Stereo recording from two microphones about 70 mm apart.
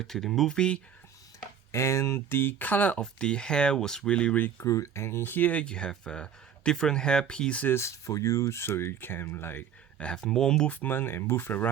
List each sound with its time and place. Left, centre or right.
0.0 s speech: centre
1.7 s speech: left
3.0 s speech: centre
4.5 s speech: left
5.6 s speech: centre
7.7 s speech: left
10.0 s speech: centre
10.7 s speech: left